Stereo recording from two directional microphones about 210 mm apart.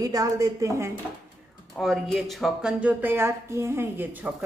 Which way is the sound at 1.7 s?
Centre (ahead or behind).